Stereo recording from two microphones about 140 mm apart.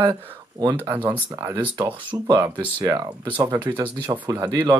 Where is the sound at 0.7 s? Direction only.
15° right (ahead or behind).